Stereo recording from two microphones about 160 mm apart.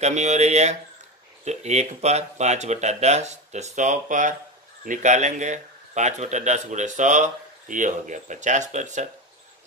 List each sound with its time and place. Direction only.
0.0 s speech: 45° right (ahead or behind)